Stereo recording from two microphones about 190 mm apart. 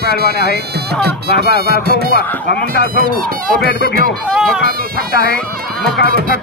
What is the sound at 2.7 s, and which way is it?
Speech, 55° left (ahead or behind).